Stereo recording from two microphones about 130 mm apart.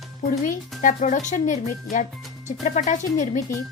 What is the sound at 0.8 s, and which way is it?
Speech, 80° left.